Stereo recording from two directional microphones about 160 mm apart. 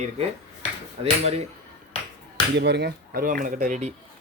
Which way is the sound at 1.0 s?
40° right (ahead or behind).